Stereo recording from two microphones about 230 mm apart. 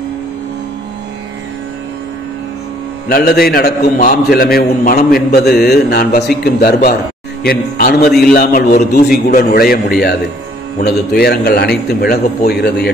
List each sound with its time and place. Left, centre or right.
3.1 s a man's voice: left